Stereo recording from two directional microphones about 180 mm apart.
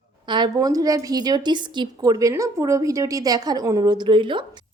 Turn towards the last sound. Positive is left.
turn(degrees=-25)  # may be behind; listen again after turning